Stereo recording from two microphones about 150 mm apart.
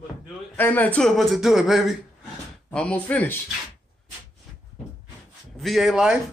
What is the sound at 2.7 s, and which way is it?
Speech, 10° left (ahead or behind).